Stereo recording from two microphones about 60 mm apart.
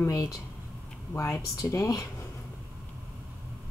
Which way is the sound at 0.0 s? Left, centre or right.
Left.